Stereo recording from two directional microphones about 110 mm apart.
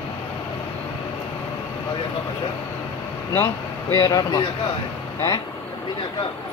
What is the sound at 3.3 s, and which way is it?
Speech, 25° left (ahead or behind).